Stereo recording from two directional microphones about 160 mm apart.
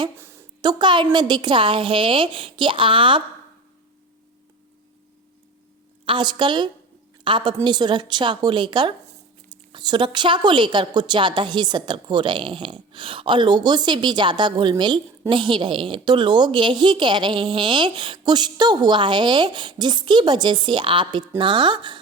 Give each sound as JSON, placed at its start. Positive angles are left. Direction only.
{"t": 0.2, "sound": "a sound", "side_deg": -15}
{"t": 0.6, "sound": "a woman's voice", "side_deg": -30}
{"t": 6.1, "sound": "a woman's voice", "side_deg": -30}